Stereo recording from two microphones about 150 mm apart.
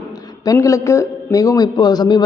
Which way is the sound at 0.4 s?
20° left (ahead or behind).